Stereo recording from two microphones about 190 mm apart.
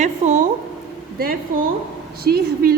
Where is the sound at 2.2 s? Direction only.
55° right (ahead or behind).